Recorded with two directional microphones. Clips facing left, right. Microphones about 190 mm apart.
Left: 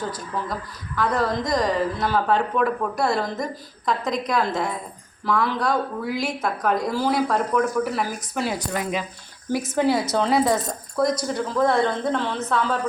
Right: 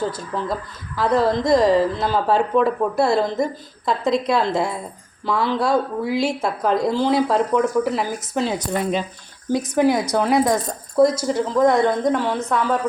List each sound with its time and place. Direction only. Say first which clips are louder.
0.9 s speech: right 5 dB; 30° right (ahead or behind)
9.5 s speech: right 3 dB; 15° right (ahead or behind)
11.0 s speech: right 6 dB; 25° right (ahead or behind)
11.6 s speech: right 4 dB; 15° right (ahead or behind)